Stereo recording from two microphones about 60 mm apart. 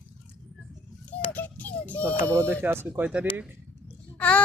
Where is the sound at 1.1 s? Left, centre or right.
Left.